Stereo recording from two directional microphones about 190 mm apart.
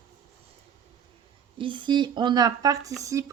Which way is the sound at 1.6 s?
25° right (ahead or behind).